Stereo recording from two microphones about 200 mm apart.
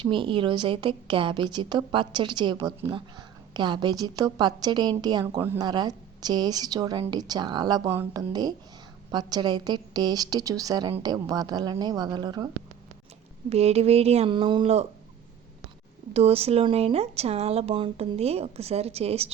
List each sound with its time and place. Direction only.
0.0 s a woman's voice: 25° right (ahead or behind)
13.5 s speech: 30° right (ahead or behind)
16.1 s speech: 30° right (ahead or behind)